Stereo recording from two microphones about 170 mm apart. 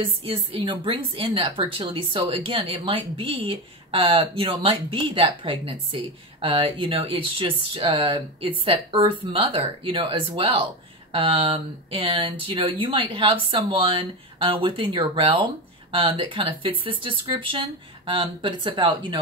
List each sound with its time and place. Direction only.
0.0 s a woman's voice: 35° right (ahead or behind)